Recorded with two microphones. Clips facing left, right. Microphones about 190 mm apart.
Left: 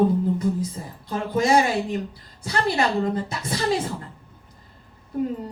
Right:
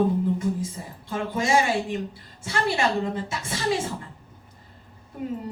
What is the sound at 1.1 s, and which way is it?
Speech, 40° left (ahead or behind).